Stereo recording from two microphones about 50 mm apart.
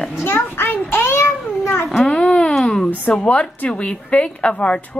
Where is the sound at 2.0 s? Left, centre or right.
Centre.